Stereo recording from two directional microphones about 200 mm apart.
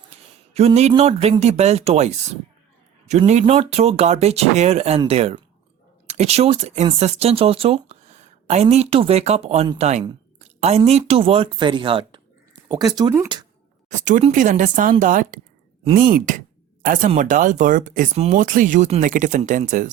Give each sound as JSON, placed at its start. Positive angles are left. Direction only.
{"t": 0.1, "sound": "speech", "side_deg": -30}
{"t": 13.9, "sound": "speech", "side_deg": -40}